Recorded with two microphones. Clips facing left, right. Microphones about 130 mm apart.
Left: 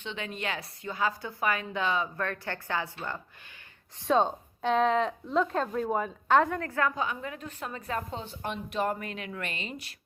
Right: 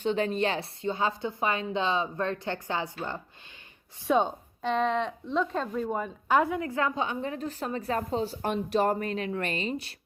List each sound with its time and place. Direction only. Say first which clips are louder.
0.0 s a woman's voice: right 9 dB; 40° right (ahead or behind); by 3.2 s 20° right (ahead or behind)
4.3 s speech: left 2 dB; centre (ahead or behind)
6.2 s a woman's voice: even; 10° right (ahead or behind); by 9.9 s 30° right (ahead or behind)